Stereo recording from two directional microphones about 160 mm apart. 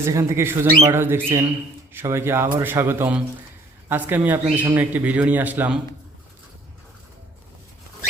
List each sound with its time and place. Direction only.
0.0 s a man's voice: 15° right (ahead or behind)